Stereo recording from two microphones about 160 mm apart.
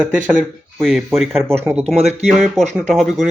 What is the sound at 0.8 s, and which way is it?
Speech, centre (ahead or behind).